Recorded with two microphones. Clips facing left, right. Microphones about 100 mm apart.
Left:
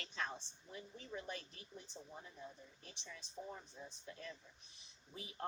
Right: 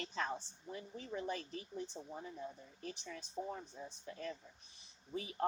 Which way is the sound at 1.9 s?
40° right (ahead or behind).